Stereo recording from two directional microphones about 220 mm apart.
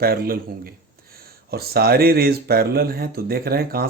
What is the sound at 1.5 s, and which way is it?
Speech, 45° right (ahead or behind).